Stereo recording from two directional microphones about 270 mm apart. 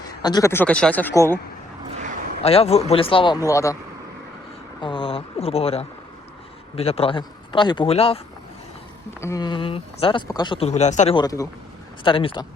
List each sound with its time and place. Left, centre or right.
0.2 s speech: centre
2.0 s a sound: right
2.4 s speech: left
4.8 s speech: centre
9.2 s speech: centre